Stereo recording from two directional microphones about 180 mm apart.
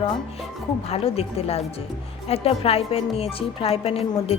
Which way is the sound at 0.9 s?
35° left (ahead or behind).